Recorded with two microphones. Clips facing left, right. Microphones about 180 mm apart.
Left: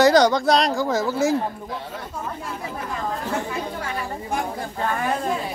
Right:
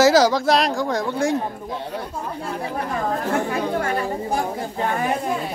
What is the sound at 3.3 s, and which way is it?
Chatter, 60° right (ahead or behind).